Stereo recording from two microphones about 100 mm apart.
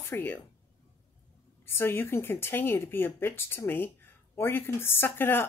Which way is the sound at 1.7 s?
25° left (ahead or behind).